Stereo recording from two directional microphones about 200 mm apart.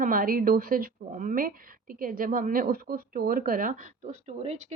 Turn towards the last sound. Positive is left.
turn(degrees=-35)  # may be behind; listen again after turning